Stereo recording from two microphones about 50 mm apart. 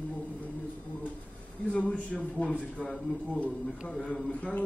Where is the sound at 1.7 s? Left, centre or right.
Left.